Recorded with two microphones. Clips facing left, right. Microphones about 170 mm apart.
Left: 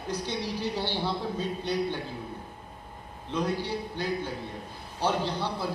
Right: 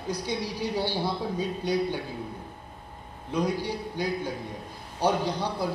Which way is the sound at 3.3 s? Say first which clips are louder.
Right 2 dB; 10° right (ahead or behind).